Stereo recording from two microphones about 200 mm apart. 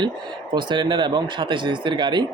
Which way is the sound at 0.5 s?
20° right (ahead or behind).